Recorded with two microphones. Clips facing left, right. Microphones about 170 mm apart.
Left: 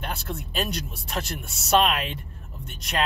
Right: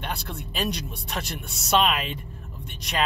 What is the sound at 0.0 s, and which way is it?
Speech, centre (ahead or behind).